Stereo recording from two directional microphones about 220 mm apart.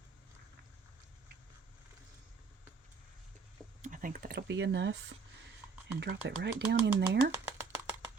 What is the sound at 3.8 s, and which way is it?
Speech, 35° right (ahead or behind).